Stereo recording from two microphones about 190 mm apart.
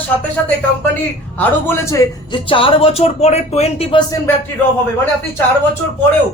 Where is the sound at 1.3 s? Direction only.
10° left (ahead or behind).